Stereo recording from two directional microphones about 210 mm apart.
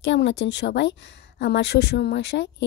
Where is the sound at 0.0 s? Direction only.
55° left (ahead or behind).